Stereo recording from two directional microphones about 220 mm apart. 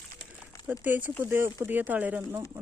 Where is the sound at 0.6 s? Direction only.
5° right (ahead or behind).